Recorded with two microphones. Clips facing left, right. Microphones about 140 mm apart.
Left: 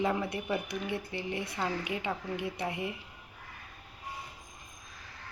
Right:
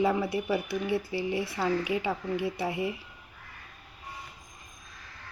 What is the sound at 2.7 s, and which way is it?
Speech, 30° right (ahead or behind).